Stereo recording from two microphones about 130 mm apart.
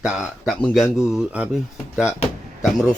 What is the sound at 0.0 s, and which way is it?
Speech, 5° right (ahead or behind).